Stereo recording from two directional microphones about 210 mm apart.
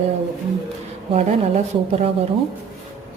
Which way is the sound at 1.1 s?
30° right (ahead or behind).